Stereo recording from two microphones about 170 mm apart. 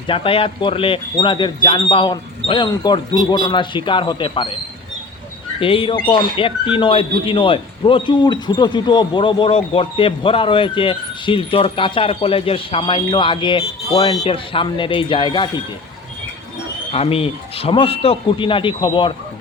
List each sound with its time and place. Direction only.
0.1 s speech: 30° left (ahead or behind)
5.5 s speech: 30° left (ahead or behind)
16.9 s speech: 35° left (ahead or behind)